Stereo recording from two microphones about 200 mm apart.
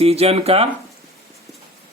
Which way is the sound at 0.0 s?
30° right (ahead or behind).